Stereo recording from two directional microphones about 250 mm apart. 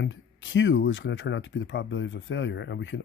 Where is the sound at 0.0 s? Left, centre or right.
Left.